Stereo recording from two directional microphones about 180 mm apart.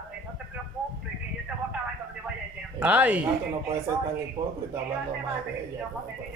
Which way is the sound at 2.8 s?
10° right (ahead or behind).